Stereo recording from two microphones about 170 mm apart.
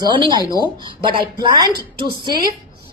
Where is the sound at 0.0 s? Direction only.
25° right (ahead or behind).